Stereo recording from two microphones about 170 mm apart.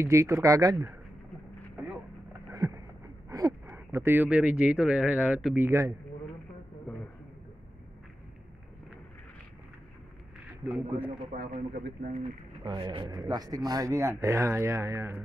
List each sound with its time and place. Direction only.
0.0 s speech: 15° right (ahead or behind)
2.5 s a sound: 20° right (ahead or behind)
3.3 s speech: 20° right (ahead or behind)
10.6 s speech: 5° right (ahead or behind)
11.3 s speech: 60° right (ahead or behind)
12.6 s speech: 25° right (ahead or behind)